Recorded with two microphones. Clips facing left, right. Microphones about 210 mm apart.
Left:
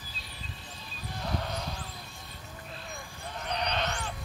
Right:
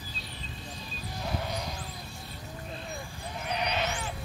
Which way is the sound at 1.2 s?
10° right (ahead or behind).